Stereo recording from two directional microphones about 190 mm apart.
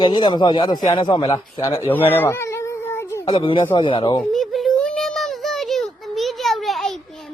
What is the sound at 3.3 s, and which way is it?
Speech, 25° left (ahead or behind).